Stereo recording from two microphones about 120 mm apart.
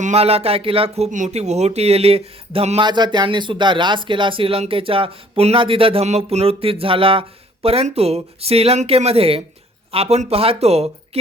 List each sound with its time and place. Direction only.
0.0 s speech: 60° right (ahead or behind)
2.8 s speech: 40° right (ahead or behind); by 11.2 s 60° right (ahead or behind)